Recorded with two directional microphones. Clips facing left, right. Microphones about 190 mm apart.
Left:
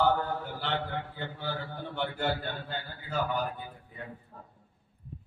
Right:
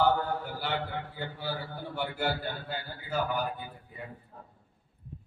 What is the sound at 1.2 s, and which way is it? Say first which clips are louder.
Mantra: even; 10° right (ahead or behind).